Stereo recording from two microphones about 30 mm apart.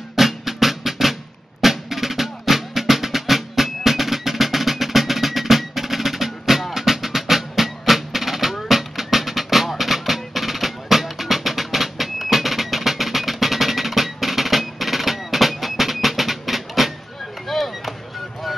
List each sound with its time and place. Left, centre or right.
0.1 s music: centre
17.5 s chop: centre